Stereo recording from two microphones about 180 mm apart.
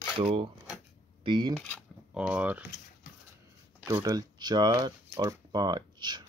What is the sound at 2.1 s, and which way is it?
Speech, 5° right (ahead or behind).